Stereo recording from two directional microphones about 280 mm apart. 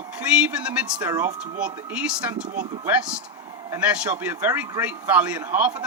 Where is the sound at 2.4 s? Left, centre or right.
Right.